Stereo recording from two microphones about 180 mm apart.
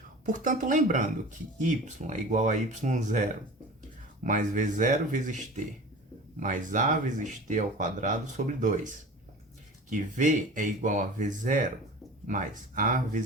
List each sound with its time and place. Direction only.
0.3 s speech: 45° right (ahead or behind)
6.4 s speech: 45° right (ahead or behind)